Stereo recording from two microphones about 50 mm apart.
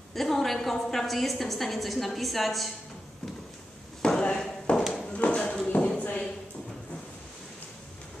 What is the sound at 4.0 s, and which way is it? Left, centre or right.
Drawer open or close, centre.